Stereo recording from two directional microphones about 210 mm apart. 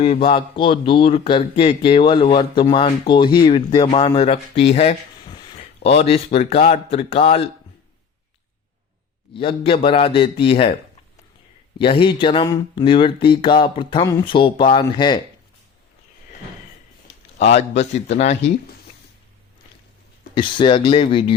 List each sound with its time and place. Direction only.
0.0 s speech: 25° left (ahead or behind)
9.4 s speech: 25° left (ahead or behind)
11.8 s speech: 25° left (ahead or behind)
17.3 s a man's voice: 35° left (ahead or behind)
20.3 s speech: 20° left (ahead or behind)